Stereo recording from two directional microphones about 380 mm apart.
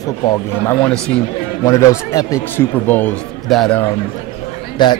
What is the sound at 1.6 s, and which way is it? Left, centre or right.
A man's voice, centre.